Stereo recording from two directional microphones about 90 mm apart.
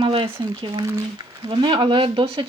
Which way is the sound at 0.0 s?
75° right (ahead or behind).